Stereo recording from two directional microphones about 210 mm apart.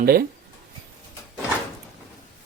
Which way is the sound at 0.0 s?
45° right (ahead or behind).